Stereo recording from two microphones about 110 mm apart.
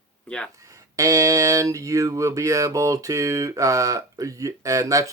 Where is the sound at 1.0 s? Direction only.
30° right (ahead or behind).